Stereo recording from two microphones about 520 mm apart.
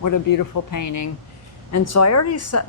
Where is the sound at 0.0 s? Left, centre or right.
Left.